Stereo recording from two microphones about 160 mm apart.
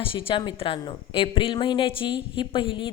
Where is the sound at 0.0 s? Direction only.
35° left (ahead or behind).